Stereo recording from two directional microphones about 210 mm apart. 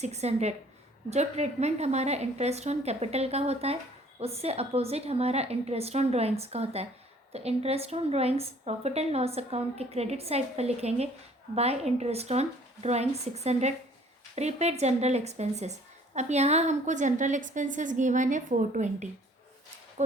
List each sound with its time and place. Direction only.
0.0 s a woman's voice: 30° right (ahead or behind)